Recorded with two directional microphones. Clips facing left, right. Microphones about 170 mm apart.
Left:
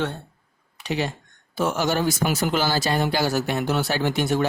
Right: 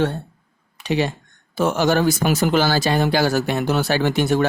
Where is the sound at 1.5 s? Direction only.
90° right.